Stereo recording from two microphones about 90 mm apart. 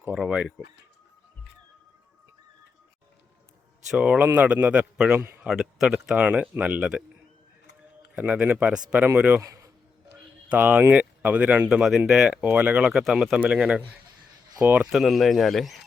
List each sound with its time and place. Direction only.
0.1 s speech: 10° right (ahead or behind)
3.9 s speech: 15° right (ahead or behind)
8.1 s speech: 15° right (ahead or behind)
9.4 s a sound: 35° right (ahead or behind)
10.5 s speech: 15° right (ahead or behind)
11.8 s speech: 5° right (ahead or behind); by 14.8 s 20° right (ahead or behind)
14.8 s speech: centre (ahead or behind)